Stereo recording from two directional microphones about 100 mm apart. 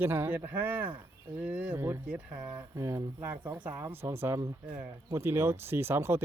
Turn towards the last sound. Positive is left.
turn(degrees=-25)  # may be behind; listen again after turning